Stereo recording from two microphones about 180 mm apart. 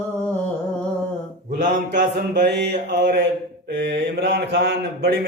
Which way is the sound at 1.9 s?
70° right (ahead or behind).